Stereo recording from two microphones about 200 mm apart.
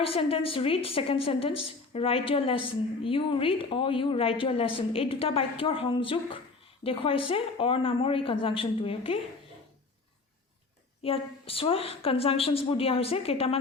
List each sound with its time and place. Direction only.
0.0 s a woman's voice: 30° left (ahead or behind)
11.0 s a woman's voice: 30° left (ahead or behind)